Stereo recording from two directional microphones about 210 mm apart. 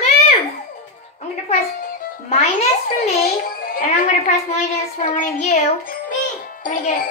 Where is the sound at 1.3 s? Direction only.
35° left (ahead or behind).